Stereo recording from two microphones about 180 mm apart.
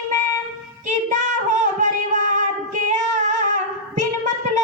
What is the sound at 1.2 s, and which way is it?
Child singing, 45° right (ahead or behind).